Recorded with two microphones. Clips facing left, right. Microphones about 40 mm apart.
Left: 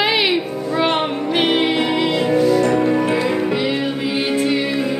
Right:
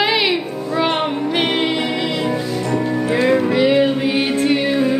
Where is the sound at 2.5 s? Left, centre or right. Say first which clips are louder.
Left 6 dB; left.